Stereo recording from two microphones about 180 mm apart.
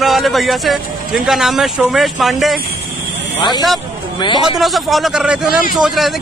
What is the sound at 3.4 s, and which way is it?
Speech, 25° left (ahead or behind).